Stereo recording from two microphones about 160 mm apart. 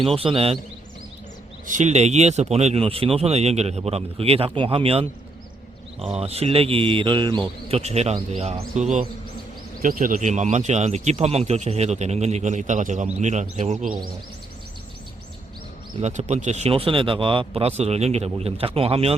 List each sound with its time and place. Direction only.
0.2 s speech: 35° right (ahead or behind)
1.6 s speech: 50° right (ahead or behind)
6.1 s speech: 40° right (ahead or behind)
7.8 s speech: 40° right (ahead or behind)
16.0 s speech: 45° right (ahead or behind)